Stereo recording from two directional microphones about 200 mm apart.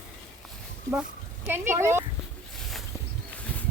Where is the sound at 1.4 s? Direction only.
10° right (ahead or behind).